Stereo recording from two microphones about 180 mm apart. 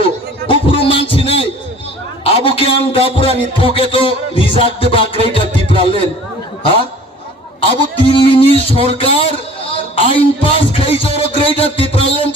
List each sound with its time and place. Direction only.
0.4 s a sound: 30° left (ahead or behind)
2.2 s music: 30° left (ahead or behind)
4.5 s a man's voice: 30° left (ahead or behind)
5.3 s music: 30° left (ahead or behind)
7.6 s a sound: 30° left (ahead or behind)
8.7 s a man's voice: 30° left (ahead or behind)